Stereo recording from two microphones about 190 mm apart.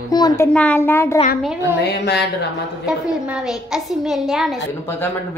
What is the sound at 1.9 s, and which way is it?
Speech, 60° left (ahead or behind).